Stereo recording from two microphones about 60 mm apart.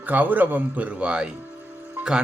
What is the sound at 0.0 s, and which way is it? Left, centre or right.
Speech, right.